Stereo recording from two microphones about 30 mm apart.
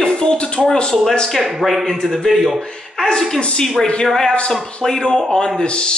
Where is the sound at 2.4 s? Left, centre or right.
Centre.